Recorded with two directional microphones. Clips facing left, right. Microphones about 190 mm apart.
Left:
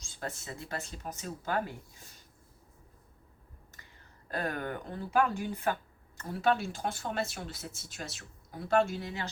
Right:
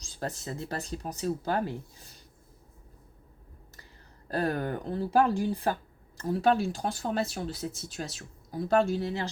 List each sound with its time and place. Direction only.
0.0 s speech: 35° right (ahead or behind)
4.3 s speech: 35° right (ahead or behind)